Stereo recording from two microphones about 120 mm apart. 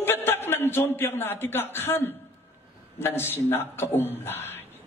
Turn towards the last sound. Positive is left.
turn(degrees=20)  # may be behind; listen again after turning